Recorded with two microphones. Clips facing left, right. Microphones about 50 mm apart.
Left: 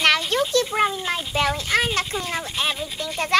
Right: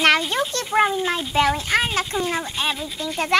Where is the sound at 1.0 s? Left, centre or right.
Centre.